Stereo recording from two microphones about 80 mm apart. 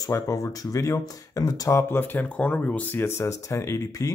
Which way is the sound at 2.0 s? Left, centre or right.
Left.